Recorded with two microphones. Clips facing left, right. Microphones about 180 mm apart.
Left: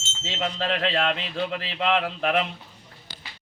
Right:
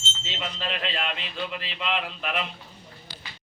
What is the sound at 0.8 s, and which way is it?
Speech, 75° left (ahead or behind).